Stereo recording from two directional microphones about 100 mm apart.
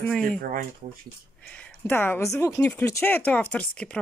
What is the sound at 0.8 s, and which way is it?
Speech, 90° right.